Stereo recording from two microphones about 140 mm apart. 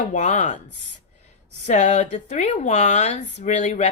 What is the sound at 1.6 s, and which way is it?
A woman's voice, 55° left (ahead or behind).